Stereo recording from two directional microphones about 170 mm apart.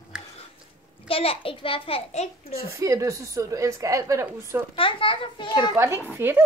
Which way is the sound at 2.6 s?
20° right (ahead or behind).